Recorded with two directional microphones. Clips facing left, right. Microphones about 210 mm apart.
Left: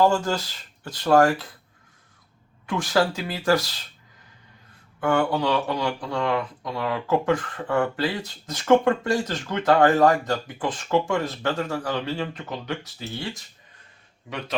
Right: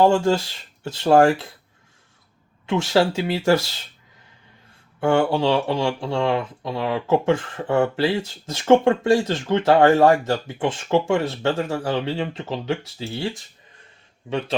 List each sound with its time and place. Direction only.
0.0 s speech: 25° right (ahead or behind)
2.6 s speech: 25° right (ahead or behind)
4.9 s speech: 25° right (ahead or behind)
14.3 s speech: 30° right (ahead or behind)